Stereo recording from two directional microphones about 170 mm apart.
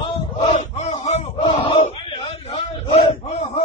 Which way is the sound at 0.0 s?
35° left (ahead or behind).